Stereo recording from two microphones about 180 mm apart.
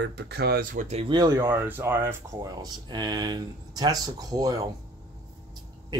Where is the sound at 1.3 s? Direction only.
10° right (ahead or behind).